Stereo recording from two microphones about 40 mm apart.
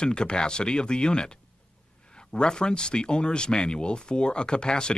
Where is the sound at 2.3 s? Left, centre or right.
Left.